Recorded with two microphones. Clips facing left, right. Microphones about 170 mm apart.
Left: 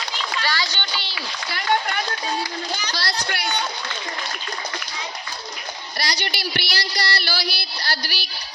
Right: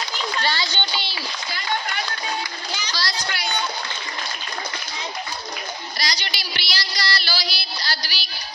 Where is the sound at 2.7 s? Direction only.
60° left (ahead or behind).